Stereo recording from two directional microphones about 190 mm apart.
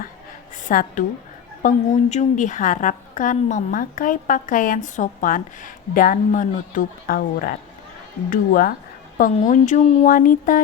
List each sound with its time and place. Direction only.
0.5 s a woman's voice: 45° left (ahead or behind)